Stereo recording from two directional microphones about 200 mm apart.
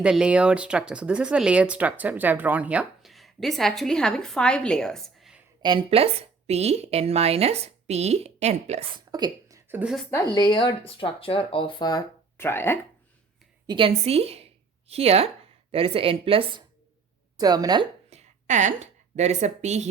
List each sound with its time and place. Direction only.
0.0 s speech: 5° right (ahead or behind)
5.6 s a woman's voice: 25° right (ahead or behind); by 10.1 s centre (ahead or behind)
10.3 s speech: 25° left (ahead or behind)
13.7 s a woman's voice: 25° right (ahead or behind)
18.1 s a woman's voice: 35° right (ahead or behind)